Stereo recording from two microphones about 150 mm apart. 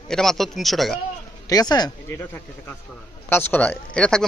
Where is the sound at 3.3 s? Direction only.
15° left (ahead or behind).